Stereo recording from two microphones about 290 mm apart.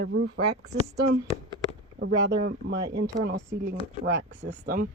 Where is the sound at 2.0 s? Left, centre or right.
Right.